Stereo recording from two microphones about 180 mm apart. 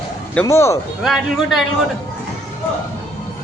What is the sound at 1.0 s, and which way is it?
Speech, centre (ahead or behind).